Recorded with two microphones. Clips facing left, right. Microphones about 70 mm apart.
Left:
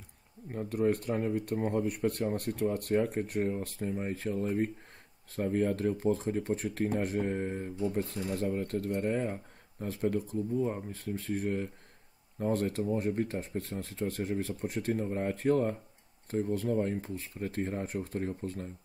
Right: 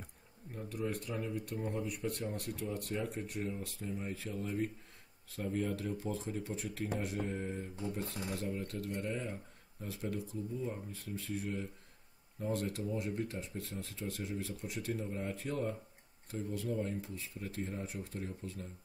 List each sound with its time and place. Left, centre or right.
0.5 s speech: left